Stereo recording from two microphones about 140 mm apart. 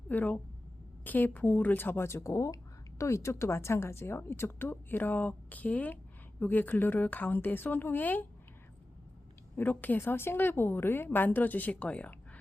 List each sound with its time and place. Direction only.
0.1 s a woman's voice: 10° left (ahead or behind)
9.6 s a woman's voice: 15° left (ahead or behind)